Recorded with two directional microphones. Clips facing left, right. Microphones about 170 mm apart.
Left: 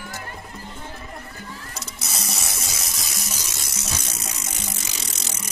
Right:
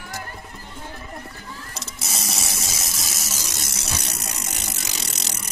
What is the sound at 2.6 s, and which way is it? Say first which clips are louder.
Water tap: right 1 dB; centre (ahead or behind).